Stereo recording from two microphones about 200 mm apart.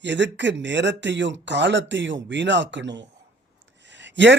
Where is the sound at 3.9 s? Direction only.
65° right (ahead or behind).